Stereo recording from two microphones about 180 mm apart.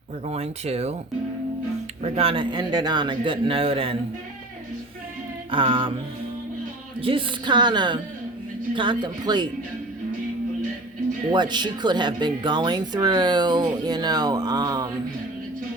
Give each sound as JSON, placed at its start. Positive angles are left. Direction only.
{"t": 0.3, "sound": "speech", "side_deg": -35}
{"t": 2.0, "sound": "speech", "side_deg": -30}
{"t": 5.5, "sound": "speech", "side_deg": -30}
{"t": 7.0, "sound": "speech", "side_deg": -30}
{"t": 11.3, "sound": "speech", "side_deg": -25}